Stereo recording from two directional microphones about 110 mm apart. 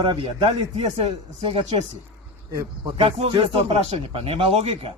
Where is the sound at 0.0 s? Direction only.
50° right (ahead or behind).